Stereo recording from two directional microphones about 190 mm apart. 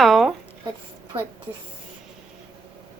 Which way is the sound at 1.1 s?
30° right (ahead or behind).